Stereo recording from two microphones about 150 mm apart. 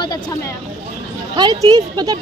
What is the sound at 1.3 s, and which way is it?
Speech, 30° right (ahead or behind).